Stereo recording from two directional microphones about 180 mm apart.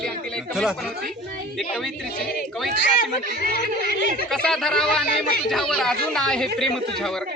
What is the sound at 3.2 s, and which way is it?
Speech, 55° right (ahead or behind).